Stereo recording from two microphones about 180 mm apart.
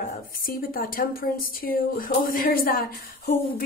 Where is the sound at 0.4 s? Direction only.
50° left (ahead or behind).